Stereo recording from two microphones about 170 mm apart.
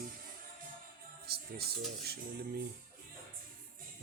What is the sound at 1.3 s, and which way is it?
Music, 65° right (ahead or behind).